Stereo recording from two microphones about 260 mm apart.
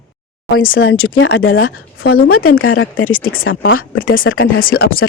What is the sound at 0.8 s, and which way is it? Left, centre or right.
Speech, left.